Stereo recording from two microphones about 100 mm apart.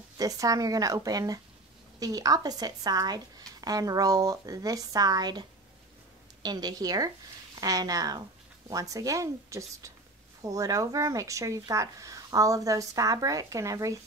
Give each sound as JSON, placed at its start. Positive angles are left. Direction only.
{"t": 0.2, "sound": "a woman's voice", "side_deg": -35}